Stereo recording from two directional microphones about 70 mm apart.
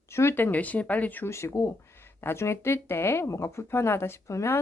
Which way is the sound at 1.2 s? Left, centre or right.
Left.